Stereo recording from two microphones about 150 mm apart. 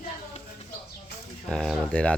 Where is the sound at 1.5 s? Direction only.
5° left (ahead or behind).